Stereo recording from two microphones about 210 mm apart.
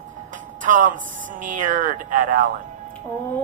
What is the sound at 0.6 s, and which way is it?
Speech, 40° right (ahead or behind).